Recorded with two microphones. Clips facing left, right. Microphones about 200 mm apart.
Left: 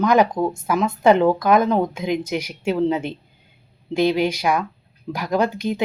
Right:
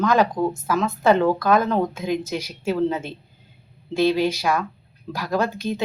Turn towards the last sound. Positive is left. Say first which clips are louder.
# left 3 dB
turn(degrees=15)  # may be behind; listen again after turning